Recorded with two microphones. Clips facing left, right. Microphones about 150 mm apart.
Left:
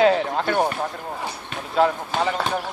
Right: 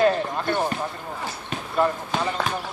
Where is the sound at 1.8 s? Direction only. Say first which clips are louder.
Left 3 dB; 75° left (ahead or behind).